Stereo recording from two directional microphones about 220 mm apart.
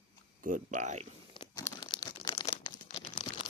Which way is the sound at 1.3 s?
20° left (ahead or behind).